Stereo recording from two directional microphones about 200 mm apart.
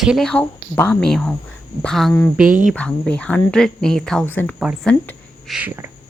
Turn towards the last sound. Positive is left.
turn(degrees=-10)  # may be behind; listen again after turning